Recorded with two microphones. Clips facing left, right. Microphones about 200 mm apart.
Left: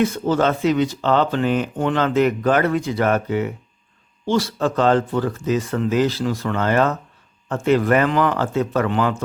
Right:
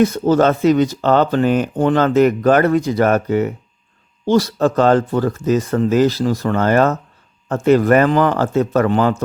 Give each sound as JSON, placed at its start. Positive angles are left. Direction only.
{"t": 0.0, "sound": "speech", "side_deg": -40}